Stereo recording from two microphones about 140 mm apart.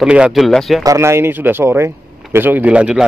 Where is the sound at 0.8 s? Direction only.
20° right (ahead or behind).